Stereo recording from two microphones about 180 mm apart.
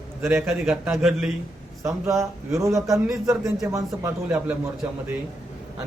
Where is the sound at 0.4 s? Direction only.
Centre (ahead or behind).